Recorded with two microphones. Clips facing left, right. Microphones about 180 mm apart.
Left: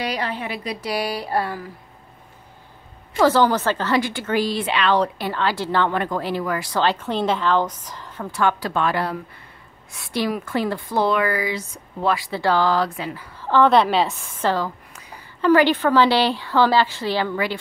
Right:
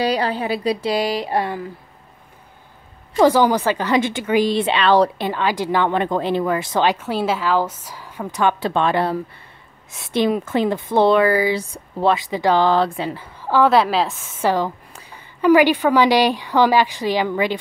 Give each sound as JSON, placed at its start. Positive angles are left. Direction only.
{"t": 0.0, "sound": "speech", "side_deg": -30}
{"t": 3.2, "sound": "speech", "side_deg": -15}
{"t": 5.2, "sound": "a woman's voice", "side_deg": -15}
{"t": 13.4, "sound": "a woman's voice", "side_deg": -10}
{"t": 15.4, "sound": "a woman's voice", "side_deg": -10}